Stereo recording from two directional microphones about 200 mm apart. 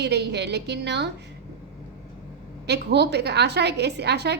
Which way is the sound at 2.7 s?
55° right (ahead or behind).